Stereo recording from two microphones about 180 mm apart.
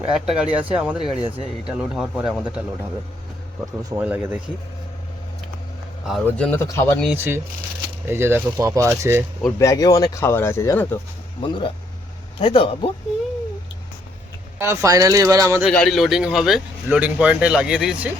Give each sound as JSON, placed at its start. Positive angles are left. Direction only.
{"t": 0.1, "sound": "a man's voice", "side_deg": -5}
{"t": 3.8, "sound": "speech", "side_deg": -10}
{"t": 6.2, "sound": "speech", "side_deg": 5}
{"t": 7.1, "sound": "speech", "side_deg": -10}
{"t": 9.6, "sound": "speech", "side_deg": 20}
{"t": 11.4, "sound": "speech", "side_deg": 25}
{"t": 14.6, "sound": "speech", "side_deg": -15}
{"t": 15.6, "sound": "a man's voice", "side_deg": 0}